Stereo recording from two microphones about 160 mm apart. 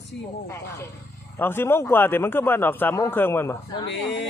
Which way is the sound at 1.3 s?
15° left (ahead or behind).